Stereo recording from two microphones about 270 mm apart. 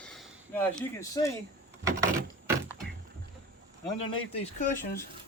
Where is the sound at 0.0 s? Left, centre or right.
Centre.